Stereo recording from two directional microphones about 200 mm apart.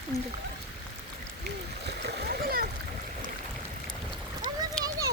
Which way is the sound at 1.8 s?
50° right (ahead or behind).